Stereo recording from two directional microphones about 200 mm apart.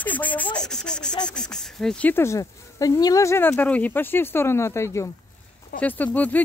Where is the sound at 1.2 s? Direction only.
5° left (ahead or behind).